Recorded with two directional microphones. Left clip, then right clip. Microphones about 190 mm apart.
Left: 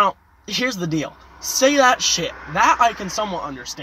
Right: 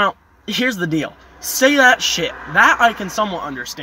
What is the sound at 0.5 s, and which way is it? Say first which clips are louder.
Speech: right 3 dB; 25° right (ahead or behind).